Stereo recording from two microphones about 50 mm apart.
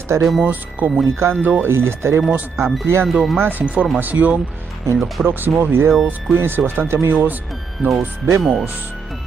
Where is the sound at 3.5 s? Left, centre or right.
Right.